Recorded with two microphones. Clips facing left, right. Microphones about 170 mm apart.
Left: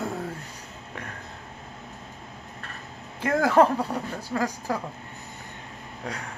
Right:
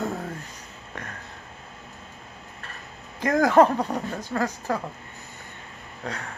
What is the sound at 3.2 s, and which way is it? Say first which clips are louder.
Speech: right 2 dB; 5° left (ahead or behind).